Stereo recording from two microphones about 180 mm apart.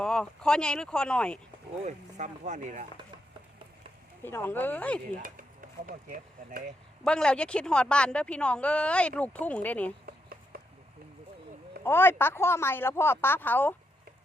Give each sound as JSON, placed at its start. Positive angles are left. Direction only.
{"t": 0.0, "sound": "speech", "side_deg": 5}
{"t": 1.8, "sound": "speech", "side_deg": -40}
{"t": 4.2, "sound": "a woman's voice", "side_deg": 10}
{"t": 5.1, "sound": "speech", "side_deg": -50}
{"t": 7.0, "sound": "speech", "side_deg": 5}
{"t": 10.1, "sound": "a sound", "side_deg": -55}
{"t": 11.8, "sound": "a woman's voice", "side_deg": 10}